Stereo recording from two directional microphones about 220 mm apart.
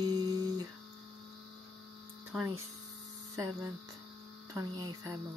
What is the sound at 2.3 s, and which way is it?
Hum, 5° right (ahead or behind).